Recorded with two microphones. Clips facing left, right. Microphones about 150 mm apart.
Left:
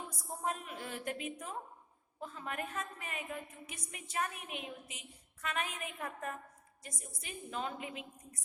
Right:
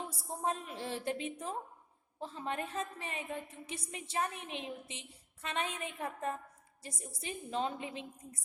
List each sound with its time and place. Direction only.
0.4 s a woman's voice: 30° right (ahead or behind)